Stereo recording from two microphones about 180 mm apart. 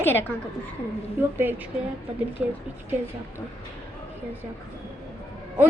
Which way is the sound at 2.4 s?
5° right (ahead or behind).